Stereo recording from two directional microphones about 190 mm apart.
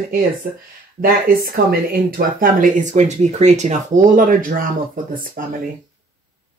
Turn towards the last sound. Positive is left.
turn(degrees=-45)  # may be behind; listen again after turning